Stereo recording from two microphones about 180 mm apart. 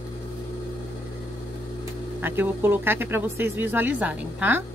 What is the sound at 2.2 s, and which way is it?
Speech, 10° right (ahead or behind).